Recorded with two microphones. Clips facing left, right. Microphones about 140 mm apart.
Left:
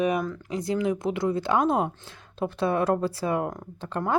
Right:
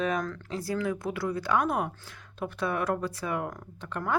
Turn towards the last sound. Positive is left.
turn(degrees=30)  # may be behind; listen again after turning